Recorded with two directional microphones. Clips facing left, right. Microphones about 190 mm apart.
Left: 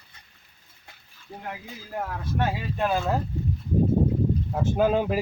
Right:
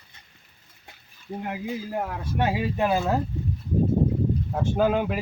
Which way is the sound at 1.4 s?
15° right (ahead or behind).